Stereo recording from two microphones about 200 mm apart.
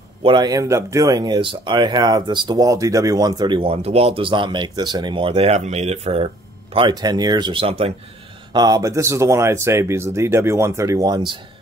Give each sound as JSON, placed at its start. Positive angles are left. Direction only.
{"t": 0.2, "sound": "speech", "side_deg": -25}
{"t": 8.5, "sound": "speech", "side_deg": -20}